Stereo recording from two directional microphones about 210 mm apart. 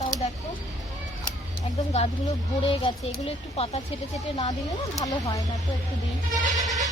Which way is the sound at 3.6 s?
30° left (ahead or behind).